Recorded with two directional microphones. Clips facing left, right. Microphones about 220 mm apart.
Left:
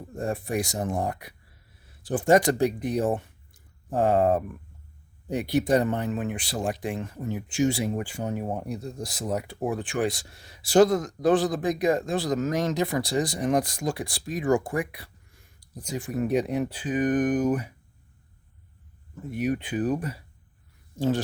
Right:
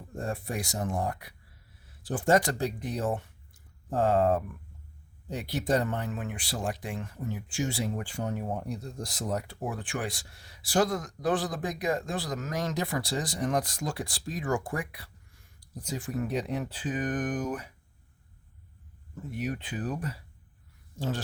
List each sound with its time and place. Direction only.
0.3 s speech: 20° left (ahead or behind)
9.6 s speech: 20° left (ahead or behind)
19.3 s speech: 15° left (ahead or behind)